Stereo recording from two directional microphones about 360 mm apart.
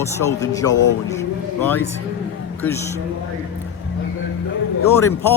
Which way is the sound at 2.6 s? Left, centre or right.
Centre.